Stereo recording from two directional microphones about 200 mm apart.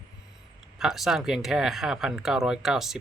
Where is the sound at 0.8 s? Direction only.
Centre (ahead or behind).